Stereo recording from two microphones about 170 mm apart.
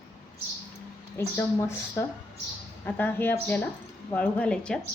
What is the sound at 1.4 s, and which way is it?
Speech, 15° left (ahead or behind).